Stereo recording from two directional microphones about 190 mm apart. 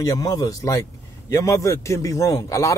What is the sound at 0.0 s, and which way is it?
A man's voice, 20° left (ahead or behind).